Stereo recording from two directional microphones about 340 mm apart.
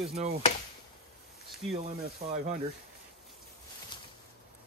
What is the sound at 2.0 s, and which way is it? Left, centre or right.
Speech, right.